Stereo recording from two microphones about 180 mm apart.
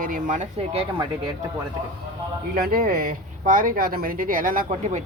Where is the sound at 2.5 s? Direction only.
55° right (ahead or behind).